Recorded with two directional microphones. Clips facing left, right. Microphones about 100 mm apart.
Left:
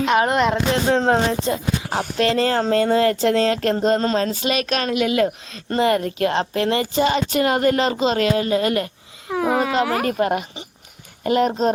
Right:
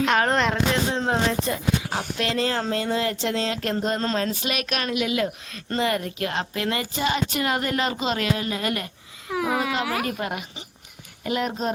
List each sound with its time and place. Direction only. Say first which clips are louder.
0.2 s a sound: left 4 dB; 15° left (ahead or behind)
1.0 s speech: left 5 dB; 35° left (ahead or behind)
2.0 s speech: left 6 dB; 40° left (ahead or behind)
3.8 s a woman's voice: left 6 dB; 30° left (ahead or behind)
4.9 s speech: left 5 dB; 45° left (ahead or behind)
5.8 s a woman's voice: left 7 dB; 30° left (ahead or behind)